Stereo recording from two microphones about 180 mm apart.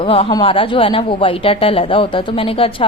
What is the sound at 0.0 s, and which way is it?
A woman's voice, 30° left (ahead or behind).